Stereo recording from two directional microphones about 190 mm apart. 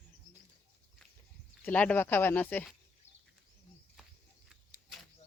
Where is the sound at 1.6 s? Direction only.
10° left (ahead or behind).